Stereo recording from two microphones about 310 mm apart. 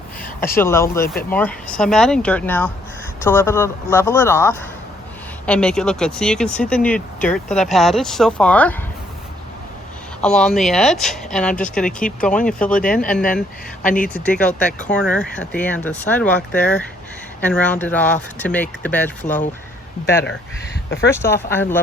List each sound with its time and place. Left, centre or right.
0.5 s speech: centre
10.2 s speech: centre
12.8 s speech: left
14.1 s speech: centre
21.1 s speech: centre